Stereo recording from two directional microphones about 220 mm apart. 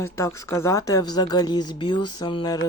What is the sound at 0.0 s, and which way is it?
Speech, 15° left (ahead or behind).